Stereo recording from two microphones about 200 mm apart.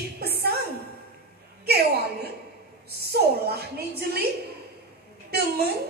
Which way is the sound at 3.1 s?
50° right (ahead or behind).